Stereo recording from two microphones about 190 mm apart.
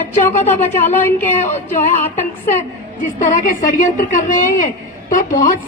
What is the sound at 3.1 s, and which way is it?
A woman's voice, 45° left (ahead or behind).